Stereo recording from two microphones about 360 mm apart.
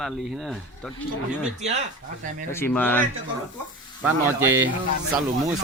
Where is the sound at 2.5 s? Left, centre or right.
Centre.